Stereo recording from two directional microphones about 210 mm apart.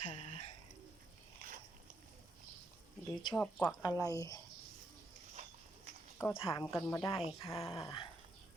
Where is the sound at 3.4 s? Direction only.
5° left (ahead or behind).